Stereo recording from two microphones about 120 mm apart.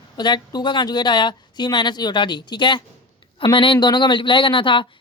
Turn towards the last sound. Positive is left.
turn(degrees=45)  # may be behind; listen again after turning